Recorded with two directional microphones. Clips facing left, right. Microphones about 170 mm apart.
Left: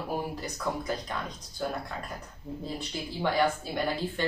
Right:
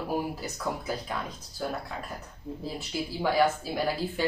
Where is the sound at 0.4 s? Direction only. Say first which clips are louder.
Even; 5° right (ahead or behind).